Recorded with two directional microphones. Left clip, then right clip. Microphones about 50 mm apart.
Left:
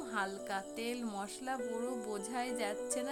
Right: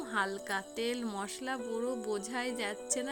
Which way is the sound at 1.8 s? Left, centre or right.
Right.